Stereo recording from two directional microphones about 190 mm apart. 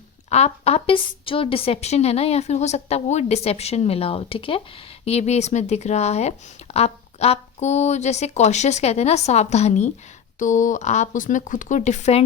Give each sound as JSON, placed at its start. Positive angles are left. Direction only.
{"t": 0.3, "sound": "a woman's voice", "side_deg": 35}